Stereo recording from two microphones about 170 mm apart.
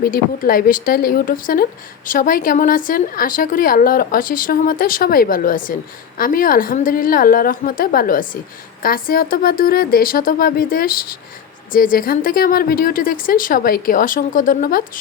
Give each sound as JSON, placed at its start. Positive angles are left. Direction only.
{"t": 0.0, "sound": "a woman's voice", "side_deg": 60}